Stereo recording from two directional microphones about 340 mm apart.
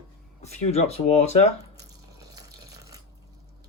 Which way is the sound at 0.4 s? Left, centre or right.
Centre.